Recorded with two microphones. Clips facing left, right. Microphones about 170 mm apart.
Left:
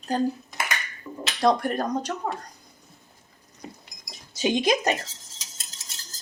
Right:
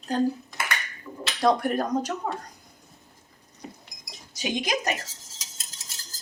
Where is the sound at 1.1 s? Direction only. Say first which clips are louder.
Left 4 dB; 25° left (ahead or behind).